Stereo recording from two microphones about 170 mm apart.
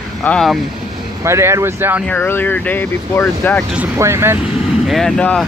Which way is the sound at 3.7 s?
10° right (ahead or behind).